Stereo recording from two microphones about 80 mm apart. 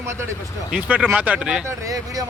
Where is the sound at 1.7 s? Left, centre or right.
Right.